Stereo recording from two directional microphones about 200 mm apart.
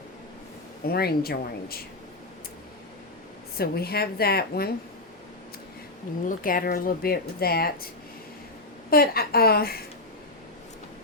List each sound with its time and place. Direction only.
0.9 s speech: 50° left (ahead or behind)
3.6 s speech: 50° left (ahead or behind)
6.2 s speech: 45° left (ahead or behind)
8.9 s speech: 50° left (ahead or behind)